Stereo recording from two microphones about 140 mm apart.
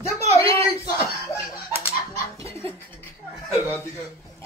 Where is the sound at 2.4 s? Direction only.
20° left (ahead or behind).